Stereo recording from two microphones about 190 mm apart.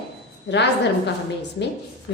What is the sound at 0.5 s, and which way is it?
A woman's voice, 65° left (ahead or behind).